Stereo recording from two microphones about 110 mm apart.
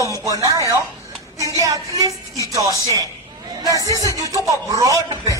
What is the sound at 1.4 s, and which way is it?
A man's voice, 30° right (ahead or behind).